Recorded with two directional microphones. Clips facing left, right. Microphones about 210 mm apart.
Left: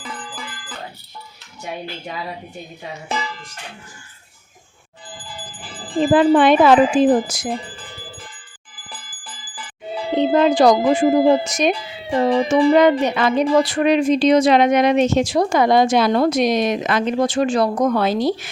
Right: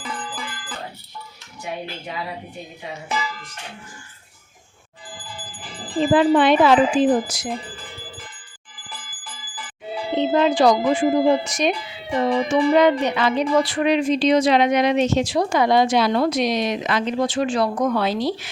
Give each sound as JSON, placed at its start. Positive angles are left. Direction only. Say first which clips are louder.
{"t": 0.0, "sound": "music", "louder": "right 2 dB", "side_deg": 45}
{"t": 3.1, "sound": "speech", "louder": "left 1 dB", "side_deg": 30}
{"t": 6.0, "sound": "speech", "louder": "left 3 dB", "side_deg": 50}
{"t": 10.2, "sound": "speech", "louder": "left 3 dB", "side_deg": 45}
{"t": 12.1, "sound": "speech", "louder": "left 3 dB", "side_deg": 30}
{"t": 12.7, "sound": "speech", "louder": "left 2 dB", "side_deg": 50}